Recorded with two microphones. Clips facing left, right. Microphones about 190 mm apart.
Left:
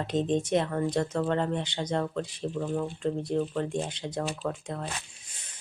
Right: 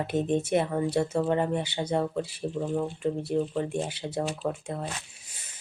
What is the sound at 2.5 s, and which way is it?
Speech, 20° right (ahead or behind).